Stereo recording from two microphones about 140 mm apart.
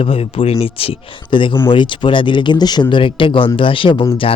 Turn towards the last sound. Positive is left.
turn(degrees=40)  # may be behind; listen again after turning